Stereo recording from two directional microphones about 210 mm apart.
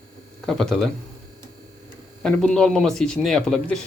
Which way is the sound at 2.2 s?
Centre (ahead or behind).